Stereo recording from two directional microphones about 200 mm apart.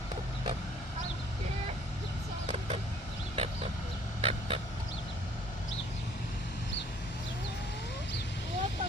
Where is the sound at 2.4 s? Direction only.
30° right (ahead or behind).